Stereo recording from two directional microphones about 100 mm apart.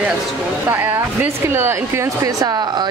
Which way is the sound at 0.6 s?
20° right (ahead or behind).